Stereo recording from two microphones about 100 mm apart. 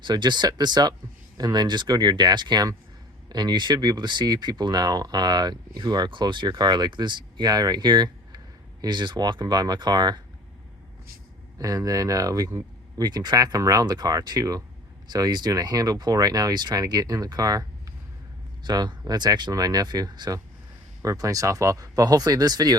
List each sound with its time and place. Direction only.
0.0 s speech: 50° right (ahead or behind)
11.5 s speech: 35° right (ahead or behind)